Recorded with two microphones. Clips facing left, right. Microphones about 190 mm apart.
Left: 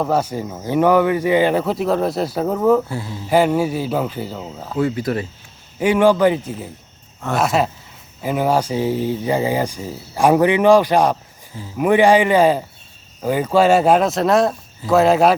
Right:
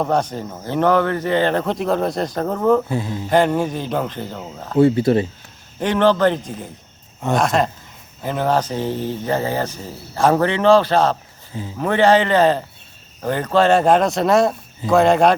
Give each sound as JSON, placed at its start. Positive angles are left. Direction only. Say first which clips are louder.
{"t": 0.0, "sound": "speech", "louder": "left 1 dB", "side_deg": 5}
{"t": 2.9, "sound": "speech", "louder": "right 4 dB", "side_deg": -20}
{"t": 3.2, "sound": "speech", "louder": "left 2 dB", "side_deg": 5}
{"t": 4.8, "sound": "speech", "louder": "right 6 dB", "side_deg": -30}
{"t": 5.8, "sound": "speech", "louder": "left 2 dB", "side_deg": 10}